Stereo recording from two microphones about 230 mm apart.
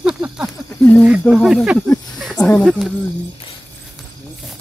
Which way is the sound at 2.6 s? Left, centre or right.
Centre.